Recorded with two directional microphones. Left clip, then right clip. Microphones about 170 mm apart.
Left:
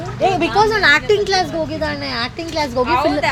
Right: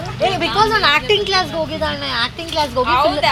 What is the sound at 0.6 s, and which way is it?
Speech, 45° left (ahead or behind).